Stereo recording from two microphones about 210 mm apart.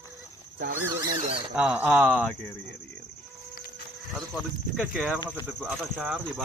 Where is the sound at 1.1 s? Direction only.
30° right (ahead or behind).